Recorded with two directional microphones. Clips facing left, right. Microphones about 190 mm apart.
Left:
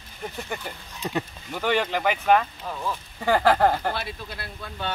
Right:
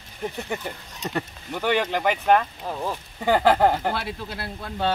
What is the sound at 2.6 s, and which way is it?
Speech, 35° right (ahead or behind).